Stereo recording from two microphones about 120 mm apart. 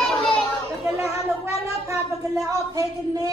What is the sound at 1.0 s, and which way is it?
Speech, 25° right (ahead or behind).